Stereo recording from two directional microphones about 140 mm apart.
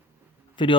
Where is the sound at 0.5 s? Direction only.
35° left (ahead or behind).